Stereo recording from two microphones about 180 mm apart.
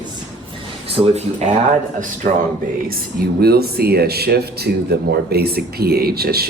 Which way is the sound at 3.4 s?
60° right (ahead or behind).